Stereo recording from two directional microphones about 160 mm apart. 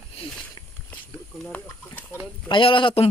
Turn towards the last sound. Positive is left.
turn(degrees=35)  # may be behind; listen again after turning